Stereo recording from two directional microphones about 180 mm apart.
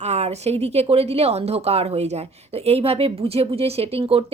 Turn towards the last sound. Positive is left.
turn(degrees=-30)  # may be behind; listen again after turning